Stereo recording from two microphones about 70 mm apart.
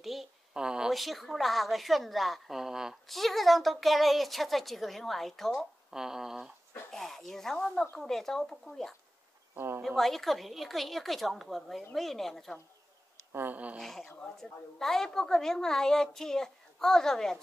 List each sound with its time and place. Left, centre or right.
0.0 s speech: centre
0.9 s a woman's voice: centre
6.9 s a sound: centre
8.0 s a woman's voice: centre
13.3 s speech: right
13.7 s a woman's voice: centre